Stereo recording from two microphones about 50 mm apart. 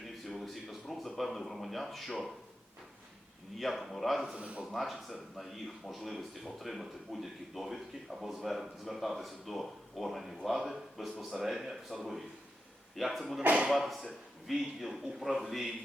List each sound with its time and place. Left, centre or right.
0.3 s a sound: centre
3.6 s speech: centre
4.4 s speech: right
4.7 s speech: centre